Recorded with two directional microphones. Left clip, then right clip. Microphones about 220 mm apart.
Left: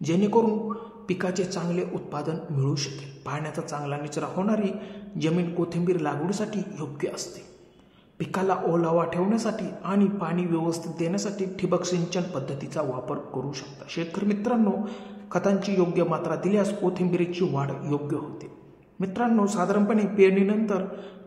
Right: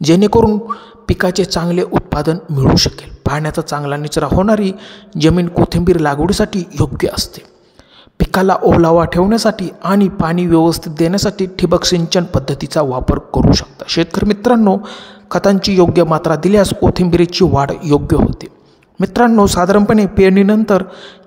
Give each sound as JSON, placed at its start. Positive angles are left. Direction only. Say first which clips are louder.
{"t": 0.0, "sound": "speech", "louder": "right 13 dB", "side_deg": -45}